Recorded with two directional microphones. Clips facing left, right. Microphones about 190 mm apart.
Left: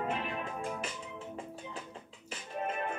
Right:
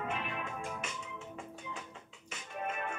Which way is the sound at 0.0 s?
35° left (ahead or behind).